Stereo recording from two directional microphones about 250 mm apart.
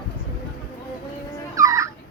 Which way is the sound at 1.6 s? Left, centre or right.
Centre.